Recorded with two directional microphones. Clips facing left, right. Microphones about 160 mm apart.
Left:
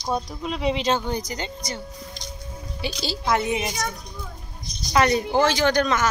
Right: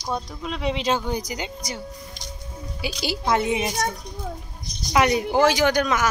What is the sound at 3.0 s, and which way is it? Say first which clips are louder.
Speech: right 1 dB; 20° right (ahead or behind).